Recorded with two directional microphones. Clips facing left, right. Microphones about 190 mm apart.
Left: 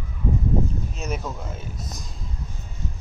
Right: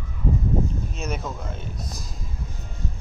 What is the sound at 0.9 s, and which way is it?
Speech, centre (ahead or behind).